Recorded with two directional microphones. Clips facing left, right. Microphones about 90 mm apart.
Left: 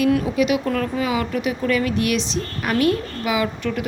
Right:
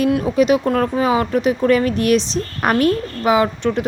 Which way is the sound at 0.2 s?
35° right (ahead or behind).